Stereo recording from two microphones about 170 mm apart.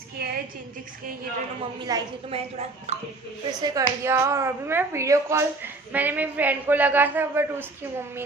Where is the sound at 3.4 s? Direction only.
20° right (ahead or behind).